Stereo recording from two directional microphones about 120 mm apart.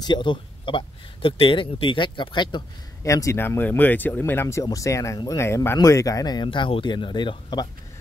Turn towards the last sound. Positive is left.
turn(degrees=40)  # may be behind; listen again after turning